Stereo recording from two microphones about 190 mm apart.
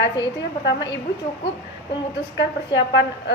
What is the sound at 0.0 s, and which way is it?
Speech, 70° left (ahead or behind).